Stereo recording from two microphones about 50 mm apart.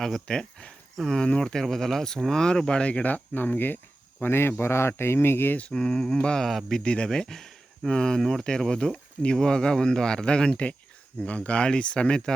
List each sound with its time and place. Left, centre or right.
0.3 s speech: centre
1.2 s speech: centre
3.0 s speech: left
4.2 s speech: left
5.7 s speech: centre
6.4 s speech: centre
6.7 s speech: centre